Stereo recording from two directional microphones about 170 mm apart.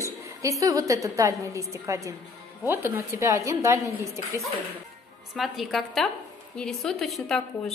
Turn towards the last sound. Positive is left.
turn(degrees=0)  # may be behind; listen again after turning